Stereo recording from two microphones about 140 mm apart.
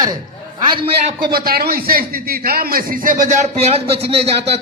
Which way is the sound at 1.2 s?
90° right.